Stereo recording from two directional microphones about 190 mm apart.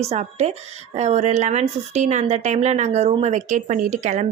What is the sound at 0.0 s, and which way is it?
A woman's voice, 35° right (ahead or behind).